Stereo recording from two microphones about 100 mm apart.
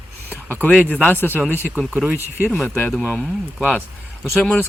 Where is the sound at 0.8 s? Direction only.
15° left (ahead or behind).